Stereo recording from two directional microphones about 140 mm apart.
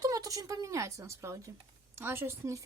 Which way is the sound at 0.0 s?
25° right (ahead or behind).